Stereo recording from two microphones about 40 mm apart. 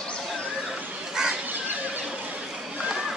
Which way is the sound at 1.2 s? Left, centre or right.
Centre.